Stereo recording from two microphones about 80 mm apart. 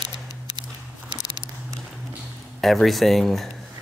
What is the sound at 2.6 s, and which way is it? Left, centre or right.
Speech, centre.